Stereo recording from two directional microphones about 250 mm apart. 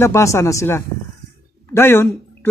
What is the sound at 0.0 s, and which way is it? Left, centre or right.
Speech, centre.